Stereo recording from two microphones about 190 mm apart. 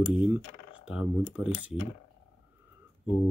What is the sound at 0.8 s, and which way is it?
Speech, 5° right (ahead or behind).